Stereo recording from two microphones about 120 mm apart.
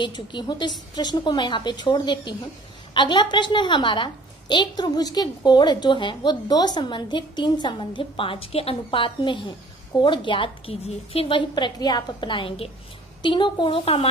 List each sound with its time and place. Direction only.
0.0 s a woman's voice: 40° left (ahead or behind)